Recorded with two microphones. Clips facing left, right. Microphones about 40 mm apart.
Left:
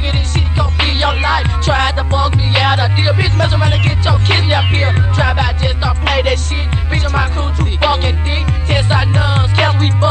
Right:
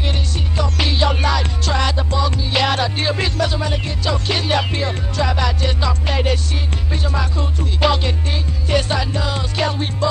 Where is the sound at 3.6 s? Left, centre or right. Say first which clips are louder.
Left 6 dB; left.